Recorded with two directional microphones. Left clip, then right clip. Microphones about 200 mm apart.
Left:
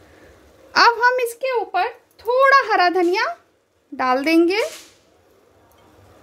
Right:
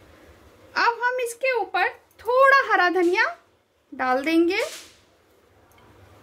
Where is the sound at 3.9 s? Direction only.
20° left (ahead or behind).